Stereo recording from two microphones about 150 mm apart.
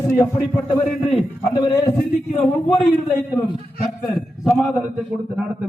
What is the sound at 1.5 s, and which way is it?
Speech, 25° left (ahead or behind).